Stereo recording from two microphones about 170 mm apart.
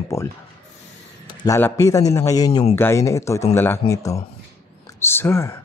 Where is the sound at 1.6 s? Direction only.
15° left (ahead or behind).